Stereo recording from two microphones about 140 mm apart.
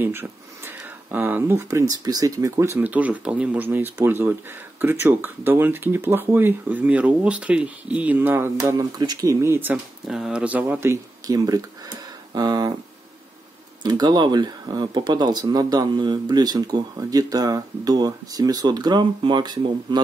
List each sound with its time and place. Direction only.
0.0 s speech: 15° right (ahead or behind)
10.0 s speech: 5° right (ahead or behind); by 12.7 s 30° right (ahead or behind)
13.8 s speech: 30° right (ahead or behind)